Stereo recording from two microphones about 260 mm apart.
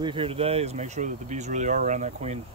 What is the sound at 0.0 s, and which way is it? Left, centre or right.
Speech, centre.